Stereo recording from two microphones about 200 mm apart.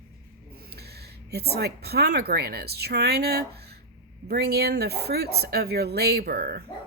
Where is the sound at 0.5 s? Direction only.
50° right (ahead or behind).